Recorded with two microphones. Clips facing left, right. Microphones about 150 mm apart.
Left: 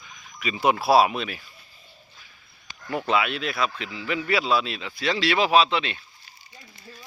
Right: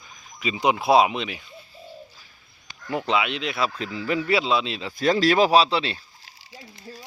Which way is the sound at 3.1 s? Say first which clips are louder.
Left 1 dB; 20° right (ahead or behind).